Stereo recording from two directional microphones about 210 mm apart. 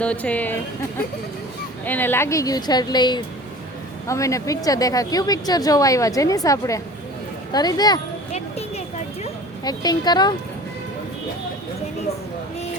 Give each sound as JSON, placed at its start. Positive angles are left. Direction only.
{"t": 0.0, "sound": "speech", "side_deg": 5}
{"t": 1.8, "sound": "speech", "side_deg": 10}
{"t": 8.3, "sound": "a sound", "side_deg": 30}
{"t": 9.6, "sound": "speech", "side_deg": 20}